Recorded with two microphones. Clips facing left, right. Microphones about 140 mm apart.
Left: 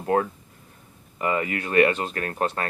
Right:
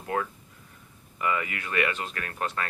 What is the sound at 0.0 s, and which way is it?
Speech, 40° left (ahead or behind).